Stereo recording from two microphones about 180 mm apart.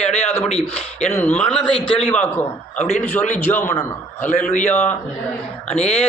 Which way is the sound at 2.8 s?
35° left (ahead or behind).